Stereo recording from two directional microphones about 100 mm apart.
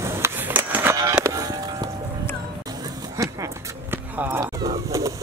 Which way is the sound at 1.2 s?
35° right (ahead or behind).